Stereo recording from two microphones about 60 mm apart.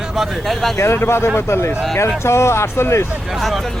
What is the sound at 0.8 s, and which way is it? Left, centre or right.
Speech, left.